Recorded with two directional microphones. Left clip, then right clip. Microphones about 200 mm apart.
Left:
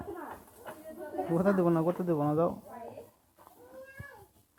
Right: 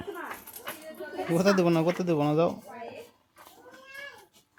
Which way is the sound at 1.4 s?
40° right (ahead or behind).